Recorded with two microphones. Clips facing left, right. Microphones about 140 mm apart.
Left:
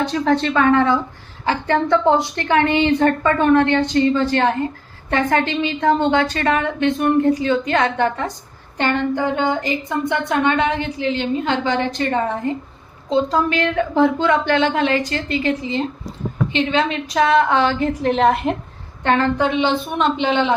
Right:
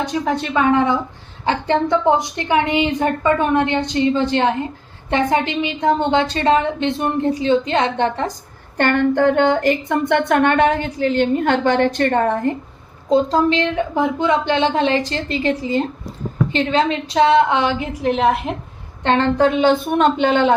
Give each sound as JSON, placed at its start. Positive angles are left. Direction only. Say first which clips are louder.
{"t": 0.0, "sound": "a woman's voice", "louder": "left 3 dB", "side_deg": -10}
{"t": 8.8, "sound": "speech", "louder": "right 4 dB", "side_deg": -55}
{"t": 13.3, "sound": "a woman's voice", "louder": "right 2 dB", "side_deg": -25}
{"t": 14.7, "sound": "a woman's voice", "louder": "right 1 dB", "side_deg": -30}
{"t": 19.0, "sound": "a woman's voice", "louder": "right 2 dB", "side_deg": -30}
{"t": 19.5, "sound": "a woman's voice", "louder": "right 4 dB", "side_deg": -45}